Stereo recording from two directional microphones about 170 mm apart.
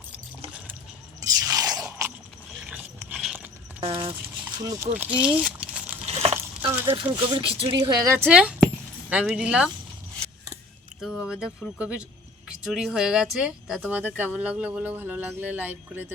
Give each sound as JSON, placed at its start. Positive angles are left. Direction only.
{"t": 1.5, "sound": "scrape", "side_deg": -20}
{"t": 3.1, "sound": "horse", "side_deg": -5}
{"t": 3.8, "sound": "speech", "side_deg": -35}
{"t": 4.6, "sound": "speech", "side_deg": -20}
{"t": 6.1, "sound": "a sound", "side_deg": -35}
{"t": 6.9, "sound": "speech", "side_deg": -30}
{"t": 11.0, "sound": "speech", "side_deg": -5}